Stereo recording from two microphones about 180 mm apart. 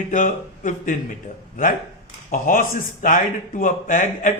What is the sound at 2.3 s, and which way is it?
A man's voice, 50° left (ahead or behind).